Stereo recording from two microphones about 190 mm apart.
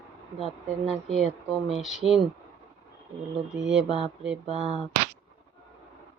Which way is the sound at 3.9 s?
30° right (ahead or behind).